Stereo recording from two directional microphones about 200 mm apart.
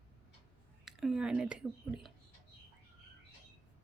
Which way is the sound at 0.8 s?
Centre (ahead or behind).